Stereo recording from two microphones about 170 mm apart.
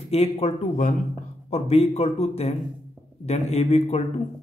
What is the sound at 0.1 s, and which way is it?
Speech, 40° left (ahead or behind).